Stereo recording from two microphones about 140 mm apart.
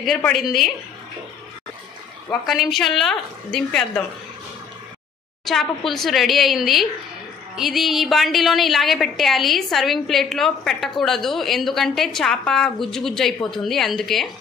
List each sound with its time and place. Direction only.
0.3 s a woman's voice: centre (ahead or behind)
2.4 s a woman's voice: centre (ahead or behind)
5.4 s a woman's voice: centre (ahead or behind)